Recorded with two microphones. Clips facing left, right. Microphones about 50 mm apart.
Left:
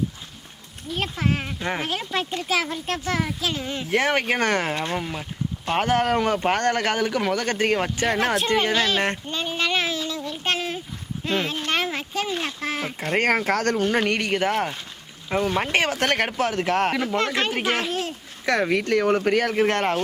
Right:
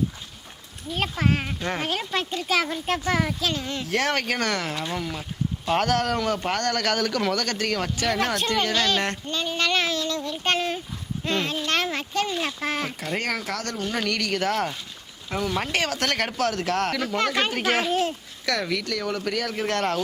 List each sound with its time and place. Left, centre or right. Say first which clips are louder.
0.9 s speech: right 1 dB; centre
1.5 s speech: left 1 dB; centre
8.7 s a child's voice: left 2 dB; centre
13.0 s speech: left 6 dB; left
17.2 s speech: left 1 dB; centre
18.4 s speech: left 5 dB; left